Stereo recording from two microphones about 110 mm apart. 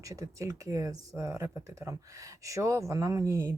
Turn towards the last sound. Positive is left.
turn(degrees=-25)  # may be behind; listen again after turning